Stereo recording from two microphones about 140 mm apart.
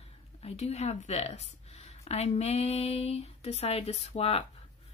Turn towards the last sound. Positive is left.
turn(degrees=45)  # may be behind; listen again after turning